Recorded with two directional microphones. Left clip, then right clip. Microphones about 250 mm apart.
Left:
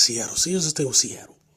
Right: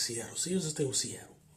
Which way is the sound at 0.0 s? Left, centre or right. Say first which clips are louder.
Left 15 dB; left.